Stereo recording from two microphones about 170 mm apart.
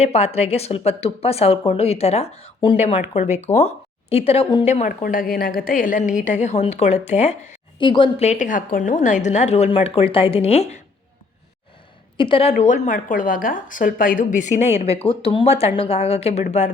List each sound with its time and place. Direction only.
0.0 s a woman's voice: 40° left (ahead or behind)
7.8 s speech: 30° left (ahead or behind)
8.3 s a woman's voice: 45° left (ahead or behind)
12.1 s a woman's voice: 30° left (ahead or behind)